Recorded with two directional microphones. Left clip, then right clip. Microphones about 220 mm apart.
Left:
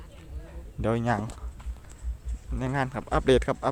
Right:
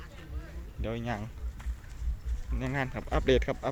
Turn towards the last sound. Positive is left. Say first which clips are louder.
# left 4 dB
turn(degrees=20)  # may be behind; listen again after turning